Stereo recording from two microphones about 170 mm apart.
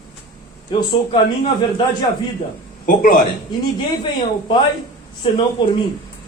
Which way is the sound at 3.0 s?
55° left (ahead or behind).